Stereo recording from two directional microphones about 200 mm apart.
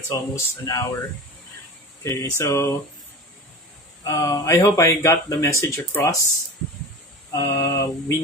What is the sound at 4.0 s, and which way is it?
Speech, 15° left (ahead or behind).